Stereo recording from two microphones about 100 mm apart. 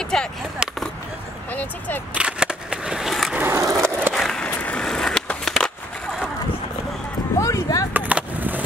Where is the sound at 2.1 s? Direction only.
10° right (ahead or behind).